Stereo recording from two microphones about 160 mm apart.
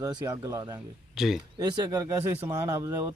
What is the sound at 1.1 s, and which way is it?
Speech, centre (ahead or behind).